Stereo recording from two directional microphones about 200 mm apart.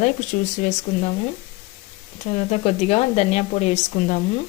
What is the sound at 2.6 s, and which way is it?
Speech, 30° left (ahead or behind).